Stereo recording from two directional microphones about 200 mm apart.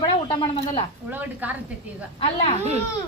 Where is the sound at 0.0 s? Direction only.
25° left (ahead or behind).